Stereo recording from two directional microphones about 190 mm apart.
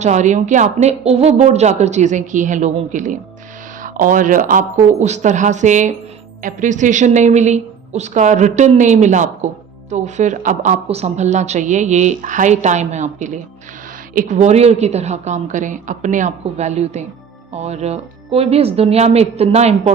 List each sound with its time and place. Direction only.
0.0 s a woman's voice: 40° right (ahead or behind)